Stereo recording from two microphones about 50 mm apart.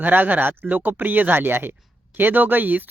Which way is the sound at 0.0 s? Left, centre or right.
Right.